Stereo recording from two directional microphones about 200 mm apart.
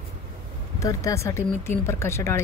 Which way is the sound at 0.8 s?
15° left (ahead or behind).